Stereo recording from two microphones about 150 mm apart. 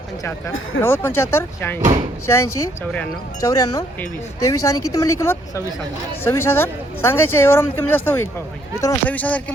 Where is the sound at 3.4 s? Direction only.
25° left (ahead or behind).